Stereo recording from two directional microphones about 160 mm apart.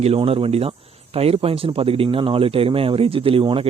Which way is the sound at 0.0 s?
40° right (ahead or behind).